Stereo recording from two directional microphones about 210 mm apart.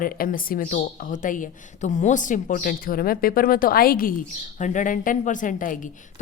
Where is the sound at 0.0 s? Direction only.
40° left (ahead or behind).